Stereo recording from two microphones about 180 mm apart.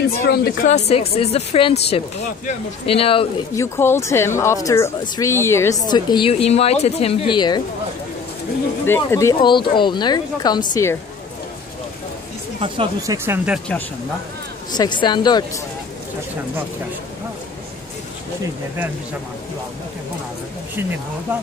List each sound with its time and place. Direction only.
0.3 s speech: 60° left (ahead or behind)
0.7 s speech: 40° left (ahead or behind)
3.5 s a woman's voice: 15° left (ahead or behind)
8.8 s a woman's voice: 15° left (ahead or behind)
12.5 s speech: 30° right (ahead or behind); by 13.6 s 10° right (ahead or behind)
14.7 s a woman's voice: 25° left (ahead or behind)
21.3 s speech: 10° right (ahead or behind)